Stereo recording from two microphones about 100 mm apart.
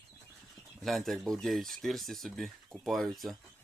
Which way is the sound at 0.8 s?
Centre (ahead or behind).